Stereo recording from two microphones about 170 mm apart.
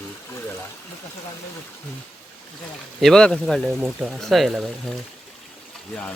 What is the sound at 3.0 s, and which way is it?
Speech, 5° left (ahead or behind).